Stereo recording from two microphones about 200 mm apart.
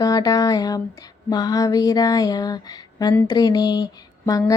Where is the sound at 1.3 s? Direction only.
20° left (ahead or behind).